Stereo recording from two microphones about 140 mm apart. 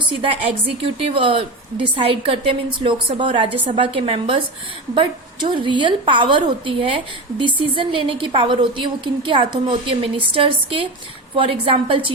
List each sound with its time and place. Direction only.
0.2 s a woman's voice: 45° right (ahead or behind)